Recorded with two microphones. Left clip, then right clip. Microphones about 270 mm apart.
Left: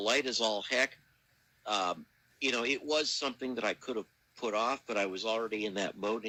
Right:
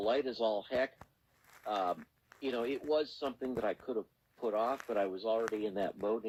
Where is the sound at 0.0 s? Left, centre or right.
Left.